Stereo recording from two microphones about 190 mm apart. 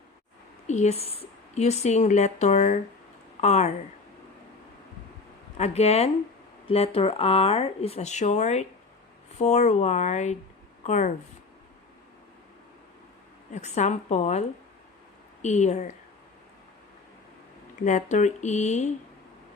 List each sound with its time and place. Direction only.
0.7 s a woman's voice: 35° left (ahead or behind)
5.5 s a woman's voice: 35° left (ahead or behind)
13.5 s a woman's voice: 40° left (ahead or behind)
17.8 s a woman's voice: 40° left (ahead or behind)